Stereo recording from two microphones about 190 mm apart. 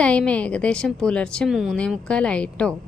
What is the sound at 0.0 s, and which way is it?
A woman's voice, 5° left (ahead or behind).